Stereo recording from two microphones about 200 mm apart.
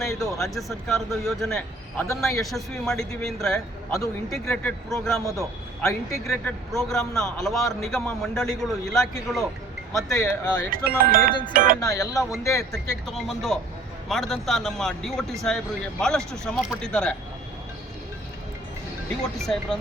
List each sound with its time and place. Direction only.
0.2 s a man's voice: centre (ahead or behind)
5.9 s speech: 15° left (ahead or behind)
6.7 s a man's voice: centre (ahead or behind)
10.1 s speech: 15° left (ahead or behind)
10.8 s speech: 45° right (ahead or behind)
11.8 s speech: 15° left (ahead or behind)
12.7 s a man's voice: centre (ahead or behind)
19.4 s a man's voice: centre (ahead or behind)